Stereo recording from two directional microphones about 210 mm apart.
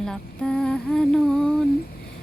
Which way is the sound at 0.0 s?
5° left (ahead or behind).